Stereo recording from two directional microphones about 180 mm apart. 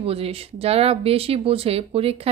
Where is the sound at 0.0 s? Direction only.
35° right (ahead or behind).